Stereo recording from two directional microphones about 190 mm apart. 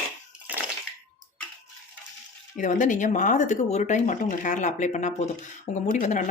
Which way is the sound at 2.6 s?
40° left (ahead or behind).